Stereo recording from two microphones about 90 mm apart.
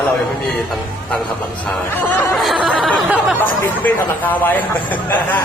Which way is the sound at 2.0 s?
15° left (ahead or behind).